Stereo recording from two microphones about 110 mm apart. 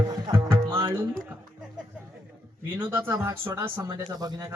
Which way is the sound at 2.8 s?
20° right (ahead or behind).